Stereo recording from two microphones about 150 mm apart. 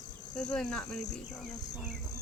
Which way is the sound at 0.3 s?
5° left (ahead or behind).